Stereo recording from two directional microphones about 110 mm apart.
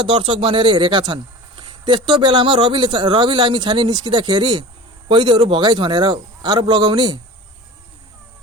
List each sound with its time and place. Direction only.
0.0 s speech: 50° right (ahead or behind)